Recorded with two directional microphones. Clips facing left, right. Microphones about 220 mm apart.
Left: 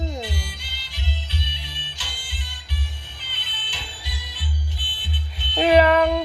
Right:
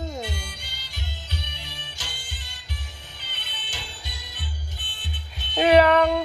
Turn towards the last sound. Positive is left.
turn(degrees=5)  # may be behind; listen again after turning